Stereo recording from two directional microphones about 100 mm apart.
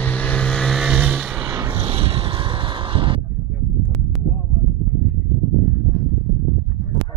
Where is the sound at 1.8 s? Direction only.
75° right (ahead or behind); by 3.2 s 60° right (ahead or behind).